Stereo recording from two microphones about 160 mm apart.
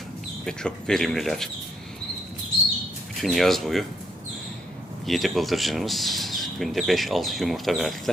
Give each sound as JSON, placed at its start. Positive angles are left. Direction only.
{"t": 0.4, "sound": "speech", "side_deg": 5}
{"t": 3.2, "sound": "speech", "side_deg": 0}
{"t": 5.0, "sound": "speech", "side_deg": 0}